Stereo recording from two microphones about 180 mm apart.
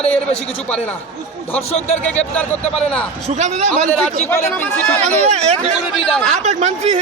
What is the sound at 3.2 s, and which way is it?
Speech, 40° right (ahead or behind).